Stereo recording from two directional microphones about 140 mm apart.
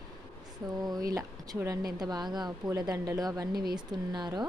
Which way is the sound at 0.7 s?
30° right (ahead or behind).